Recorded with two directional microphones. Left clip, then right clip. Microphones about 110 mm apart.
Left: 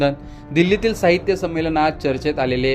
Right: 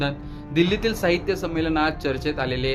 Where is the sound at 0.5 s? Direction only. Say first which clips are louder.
Left 4 dB; 40° left (ahead or behind).